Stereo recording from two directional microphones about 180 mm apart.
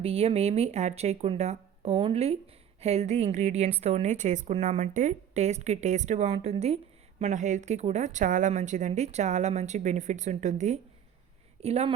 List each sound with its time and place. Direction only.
0.0 s speech: 35° right (ahead or behind)